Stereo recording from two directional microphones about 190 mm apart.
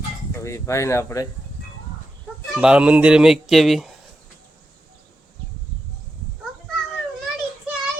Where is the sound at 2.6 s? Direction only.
5° right (ahead or behind).